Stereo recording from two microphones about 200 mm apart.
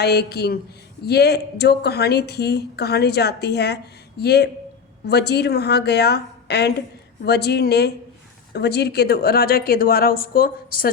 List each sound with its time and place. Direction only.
0.0 s a woman's voice: 55° left (ahead or behind)